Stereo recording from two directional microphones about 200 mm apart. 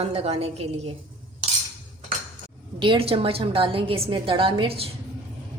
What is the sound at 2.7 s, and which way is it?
A woman's voice, 25° right (ahead or behind).